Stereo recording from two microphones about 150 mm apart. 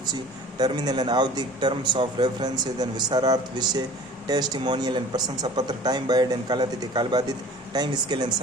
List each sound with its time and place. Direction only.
0.6 s speech: 30° right (ahead or behind)